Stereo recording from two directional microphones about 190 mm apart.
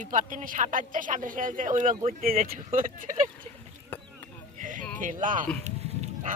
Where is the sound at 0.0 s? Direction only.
45° right (ahead or behind).